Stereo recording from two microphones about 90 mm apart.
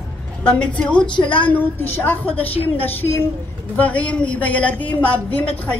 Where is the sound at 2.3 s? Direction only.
90° left.